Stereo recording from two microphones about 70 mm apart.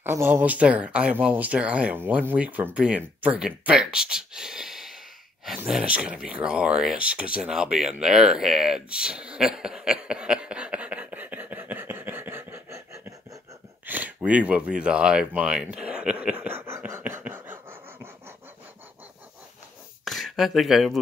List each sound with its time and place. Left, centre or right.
0.0 s speech: right
0.5 s speech: centre
3.7 s sigh: centre
5.9 s speech: centre
8.0 s a sound: centre; by 13.0 s right
13.8 s speech: right
16.5 s a sound: right
20.1 s speech: centre